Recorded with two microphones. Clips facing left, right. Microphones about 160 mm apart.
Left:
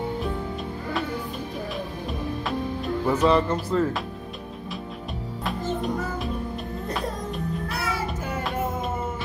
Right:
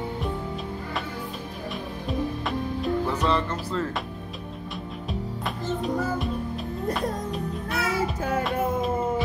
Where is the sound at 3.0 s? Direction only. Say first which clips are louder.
Left 5 dB; 5° left (ahead or behind).